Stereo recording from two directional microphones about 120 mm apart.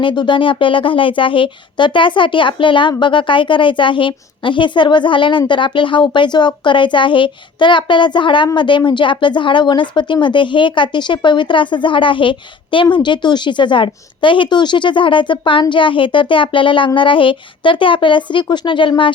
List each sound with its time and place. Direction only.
0.0 s a woman's voice: 40° left (ahead or behind)